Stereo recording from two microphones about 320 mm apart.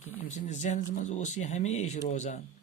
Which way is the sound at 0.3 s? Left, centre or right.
Left.